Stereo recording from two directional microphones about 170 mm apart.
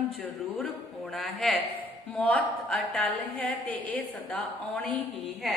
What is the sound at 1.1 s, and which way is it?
A woman's voice, centre (ahead or behind).